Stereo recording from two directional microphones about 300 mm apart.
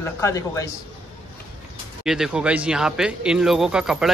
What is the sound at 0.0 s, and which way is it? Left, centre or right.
Speech, centre.